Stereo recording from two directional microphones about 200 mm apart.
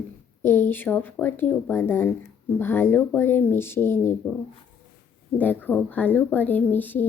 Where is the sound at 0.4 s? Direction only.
10° left (ahead or behind).